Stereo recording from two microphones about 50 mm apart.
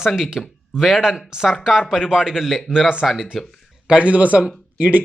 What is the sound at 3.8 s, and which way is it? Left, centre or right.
Speech, right.